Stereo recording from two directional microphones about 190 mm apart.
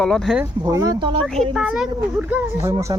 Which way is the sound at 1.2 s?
Centre (ahead or behind).